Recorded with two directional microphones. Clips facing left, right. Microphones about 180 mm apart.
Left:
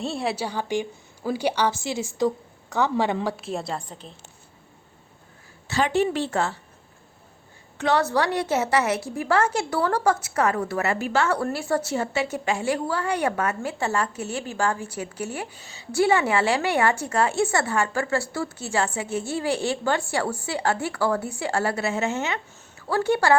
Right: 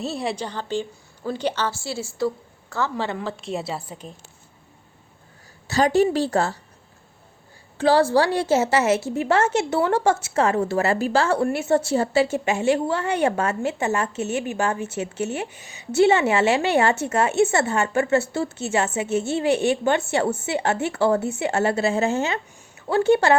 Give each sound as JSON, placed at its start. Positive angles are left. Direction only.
{"t": 0.0, "sound": "a woman's voice", "side_deg": 0}
{"t": 5.6, "sound": "a woman's voice", "side_deg": -40}
{"t": 7.8, "sound": "a woman's voice", "side_deg": -30}